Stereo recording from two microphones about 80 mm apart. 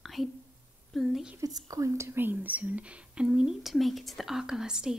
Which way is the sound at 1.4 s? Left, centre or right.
Right.